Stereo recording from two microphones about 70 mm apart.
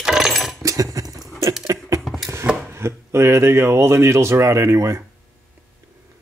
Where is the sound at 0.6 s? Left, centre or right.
Right.